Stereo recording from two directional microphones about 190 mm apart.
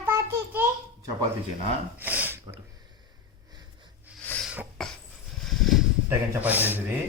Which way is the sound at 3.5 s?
20° right (ahead or behind).